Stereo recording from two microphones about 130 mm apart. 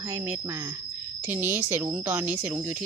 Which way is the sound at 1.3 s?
15° right (ahead or behind).